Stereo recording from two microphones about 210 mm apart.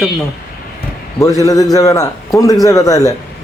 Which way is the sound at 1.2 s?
15° left (ahead or behind).